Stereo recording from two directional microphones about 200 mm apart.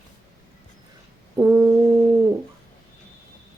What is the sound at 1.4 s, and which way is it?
Brass instrument, 15° right (ahead or behind).